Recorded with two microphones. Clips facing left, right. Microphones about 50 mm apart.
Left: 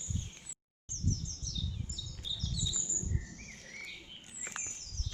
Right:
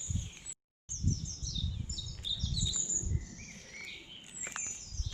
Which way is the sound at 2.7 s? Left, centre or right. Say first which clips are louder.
Even; centre.